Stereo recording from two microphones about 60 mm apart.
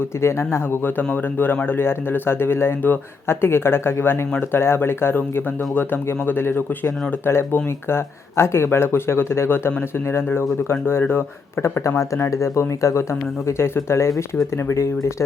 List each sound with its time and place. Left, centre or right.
0.1 s speech: left
11.8 s speech: left